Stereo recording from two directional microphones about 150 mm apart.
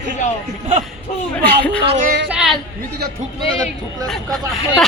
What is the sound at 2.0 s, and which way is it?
Speech, 70° right (ahead or behind).